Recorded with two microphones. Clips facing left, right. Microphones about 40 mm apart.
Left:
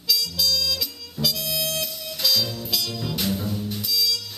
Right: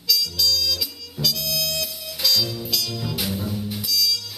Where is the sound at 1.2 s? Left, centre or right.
Centre.